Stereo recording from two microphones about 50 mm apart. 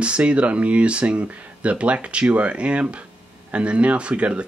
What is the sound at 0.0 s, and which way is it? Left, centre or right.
Speech, right.